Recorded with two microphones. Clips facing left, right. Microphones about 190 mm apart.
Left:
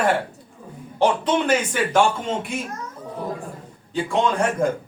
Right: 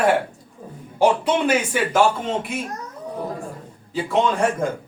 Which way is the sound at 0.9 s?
10° right (ahead or behind).